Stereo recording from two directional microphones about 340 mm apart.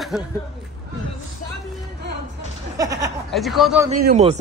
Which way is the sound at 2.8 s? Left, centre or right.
Centre.